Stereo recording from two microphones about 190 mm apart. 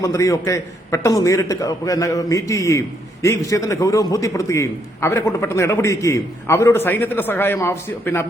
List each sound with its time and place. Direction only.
0.0 s a man's voice: 15° left (ahead or behind)